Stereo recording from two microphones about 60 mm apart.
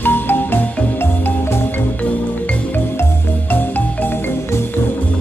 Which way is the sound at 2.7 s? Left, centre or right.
Left.